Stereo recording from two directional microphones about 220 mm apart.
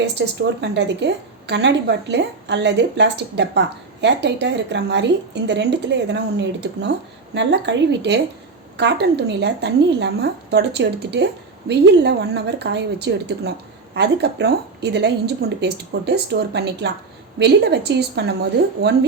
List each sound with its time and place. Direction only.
0.0 s a woman's voice: 50° right (ahead or behind)